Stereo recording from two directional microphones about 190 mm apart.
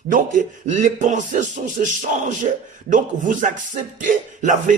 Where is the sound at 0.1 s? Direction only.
40° right (ahead or behind).